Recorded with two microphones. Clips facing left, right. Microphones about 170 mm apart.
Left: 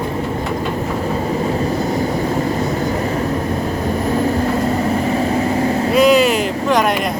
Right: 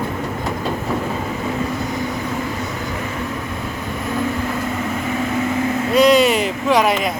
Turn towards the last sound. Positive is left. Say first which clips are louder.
# left 1 dB
turn(degrees=0)  # may be behind; listen again after turning